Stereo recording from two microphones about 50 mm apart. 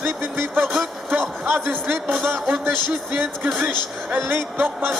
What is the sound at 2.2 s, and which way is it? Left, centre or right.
Speech, right.